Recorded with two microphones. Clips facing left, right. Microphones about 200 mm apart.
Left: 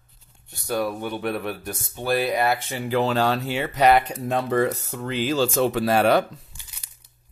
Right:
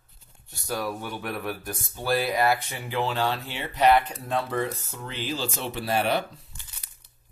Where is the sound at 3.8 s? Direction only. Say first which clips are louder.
Left 2 dB; 85° left.